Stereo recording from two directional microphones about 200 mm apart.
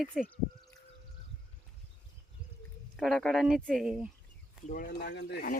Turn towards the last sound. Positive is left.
turn(degrees=50)  # may be behind; listen again after turning